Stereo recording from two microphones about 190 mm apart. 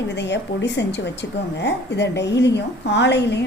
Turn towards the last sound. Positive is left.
turn(degrees=65)  # may be behind; listen again after turning